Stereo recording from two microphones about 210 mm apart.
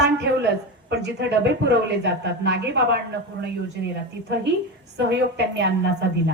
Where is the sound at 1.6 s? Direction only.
55° right (ahead or behind).